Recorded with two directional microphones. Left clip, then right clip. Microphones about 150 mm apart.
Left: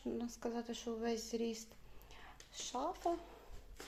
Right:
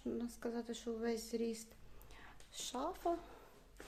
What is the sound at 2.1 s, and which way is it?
Whispering, 15° right (ahead or behind).